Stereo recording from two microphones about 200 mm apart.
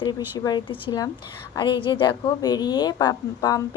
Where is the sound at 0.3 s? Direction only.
20° left (ahead or behind).